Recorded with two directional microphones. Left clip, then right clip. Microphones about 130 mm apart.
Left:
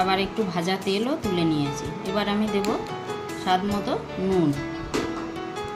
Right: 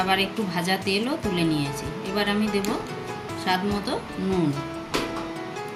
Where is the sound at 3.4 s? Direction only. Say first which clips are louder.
Left 1 dB; 30° left (ahead or behind).